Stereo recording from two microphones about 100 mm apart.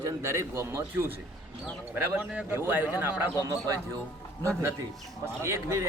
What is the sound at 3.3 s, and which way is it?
Speech, 35° right (ahead or behind).